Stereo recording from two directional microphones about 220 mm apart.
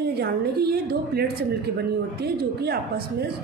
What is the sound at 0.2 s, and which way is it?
A woman's voice, 45° right (ahead or behind).